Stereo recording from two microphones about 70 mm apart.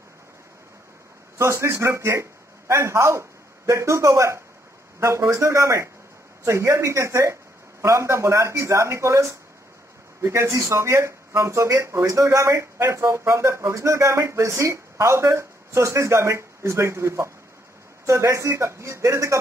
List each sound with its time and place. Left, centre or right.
1.4 s a man's voice: right